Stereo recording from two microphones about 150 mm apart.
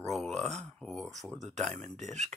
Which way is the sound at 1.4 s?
50° right (ahead or behind).